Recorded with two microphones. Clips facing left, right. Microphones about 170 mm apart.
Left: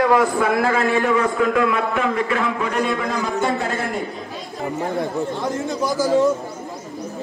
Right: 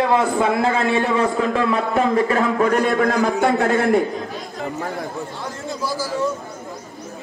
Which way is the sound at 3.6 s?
60° right (ahead or behind).